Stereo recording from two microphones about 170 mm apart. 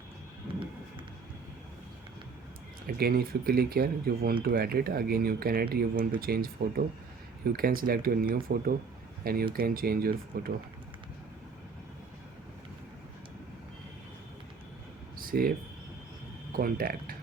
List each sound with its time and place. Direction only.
2.8 s speech: 65° right (ahead or behind)
15.2 s a sound: 60° right (ahead or behind)
16.5 s speech: 60° right (ahead or behind)